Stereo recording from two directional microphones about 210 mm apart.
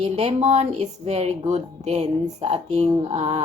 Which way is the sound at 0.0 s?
30° right (ahead or behind).